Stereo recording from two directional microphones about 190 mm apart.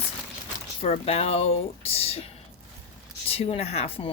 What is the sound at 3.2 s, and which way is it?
Speech, 30° left (ahead or behind).